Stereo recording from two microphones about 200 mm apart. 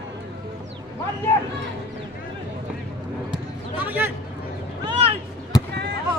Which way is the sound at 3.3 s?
10° right (ahead or behind).